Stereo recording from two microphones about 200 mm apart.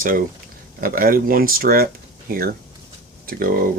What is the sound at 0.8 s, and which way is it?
Speech, 45° right (ahead or behind).